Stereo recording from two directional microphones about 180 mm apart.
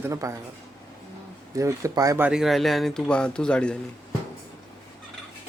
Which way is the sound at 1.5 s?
15° right (ahead or behind).